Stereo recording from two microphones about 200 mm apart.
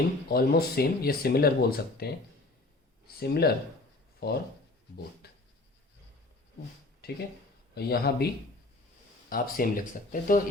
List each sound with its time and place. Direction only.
0.3 s speech: 50° left (ahead or behind)
3.2 s speech: 50° left (ahead or behind)
5.2 s a sound: 55° left (ahead or behind)
7.0 s speech: 50° left (ahead or behind)
9.3 s speech: 45° left (ahead or behind)